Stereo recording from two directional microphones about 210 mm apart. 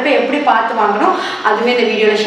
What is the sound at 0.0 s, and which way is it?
A woman's voice, centre (ahead or behind).